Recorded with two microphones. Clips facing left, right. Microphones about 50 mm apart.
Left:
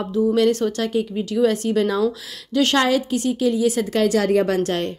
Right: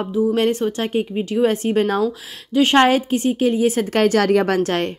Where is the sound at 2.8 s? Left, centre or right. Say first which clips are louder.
Right 4 dB; right.